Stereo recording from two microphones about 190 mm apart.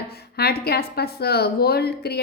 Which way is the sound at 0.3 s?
55° left (ahead or behind).